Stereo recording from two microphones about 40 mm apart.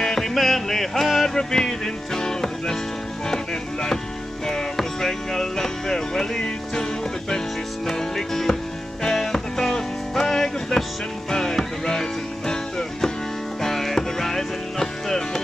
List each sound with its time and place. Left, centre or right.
0.0 s music: centre
1.3 s music: centre
4.5 s music: centre